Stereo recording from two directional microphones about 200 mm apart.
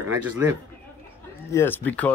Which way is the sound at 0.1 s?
10° right (ahead or behind).